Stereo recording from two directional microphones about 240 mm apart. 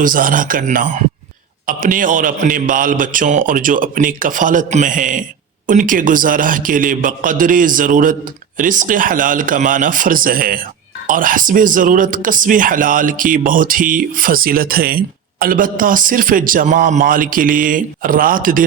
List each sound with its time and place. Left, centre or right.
0.0 s speech: right